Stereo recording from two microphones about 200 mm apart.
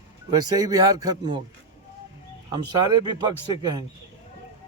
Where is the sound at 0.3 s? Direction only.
20° right (ahead or behind).